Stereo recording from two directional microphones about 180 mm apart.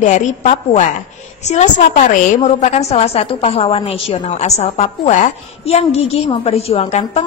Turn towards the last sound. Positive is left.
turn(degrees=35)  # may be behind; listen again after turning